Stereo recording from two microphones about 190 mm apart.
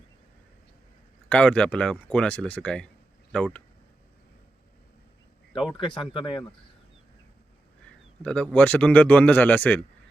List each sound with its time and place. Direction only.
1.3 s speech: 5° left (ahead or behind)
5.7 s speech: 25° left (ahead or behind)
7.9 s a man's voice: 5° left (ahead or behind)